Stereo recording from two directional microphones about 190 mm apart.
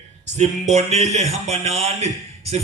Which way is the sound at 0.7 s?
35° right (ahead or behind).